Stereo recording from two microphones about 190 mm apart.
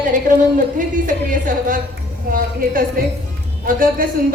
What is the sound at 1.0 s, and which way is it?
Speech, 45° right (ahead or behind).